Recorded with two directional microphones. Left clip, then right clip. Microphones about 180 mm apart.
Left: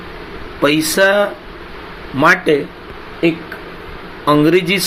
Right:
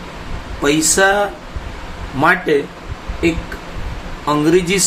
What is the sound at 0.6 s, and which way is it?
Speech, 15° left (ahead or behind).